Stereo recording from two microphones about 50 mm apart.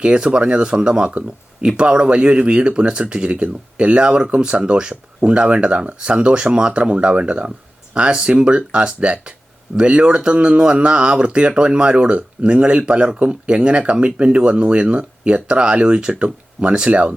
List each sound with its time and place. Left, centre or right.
0.0 s speech: right